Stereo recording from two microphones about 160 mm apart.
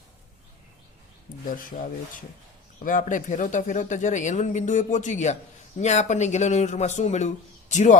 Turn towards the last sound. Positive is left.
turn(degrees=50)  # may be behind; listen again after turning